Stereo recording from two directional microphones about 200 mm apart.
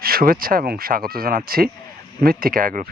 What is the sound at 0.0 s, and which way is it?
Speech, 45° right (ahead or behind).